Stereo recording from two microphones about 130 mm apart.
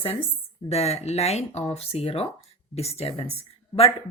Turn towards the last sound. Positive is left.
turn(degrees=50)  # may be behind; listen again after turning